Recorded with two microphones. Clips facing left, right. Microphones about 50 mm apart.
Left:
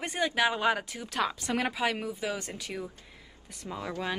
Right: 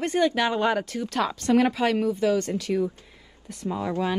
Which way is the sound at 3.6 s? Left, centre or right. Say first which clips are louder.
Right 9 dB; centre.